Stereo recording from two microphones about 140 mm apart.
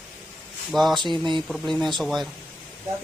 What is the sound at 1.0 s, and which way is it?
Speech, 35° right (ahead or behind).